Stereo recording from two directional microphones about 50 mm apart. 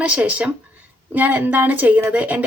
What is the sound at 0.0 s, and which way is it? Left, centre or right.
A woman's voice, right.